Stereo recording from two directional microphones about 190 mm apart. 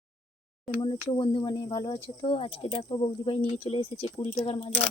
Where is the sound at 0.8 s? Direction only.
25° left (ahead or behind).